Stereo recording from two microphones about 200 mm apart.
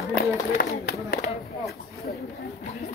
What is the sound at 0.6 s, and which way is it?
Speech, 45° left (ahead or behind).